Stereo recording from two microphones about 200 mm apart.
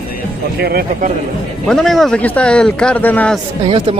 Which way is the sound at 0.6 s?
50° right (ahead or behind).